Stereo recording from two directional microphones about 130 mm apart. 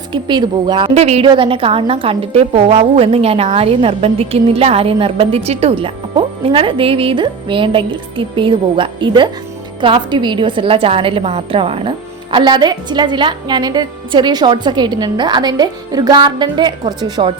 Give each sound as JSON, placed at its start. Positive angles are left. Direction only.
{"t": 0.1, "sound": "a woman's voice", "side_deg": -35}
{"t": 0.9, "sound": "a woman's voice", "side_deg": -55}
{"t": 1.3, "sound": "a woman's voice", "side_deg": -45}